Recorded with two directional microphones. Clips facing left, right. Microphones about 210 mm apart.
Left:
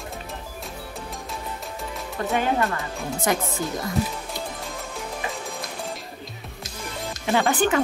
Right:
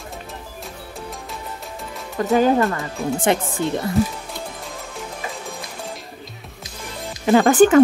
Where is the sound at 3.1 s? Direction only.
30° right (ahead or behind).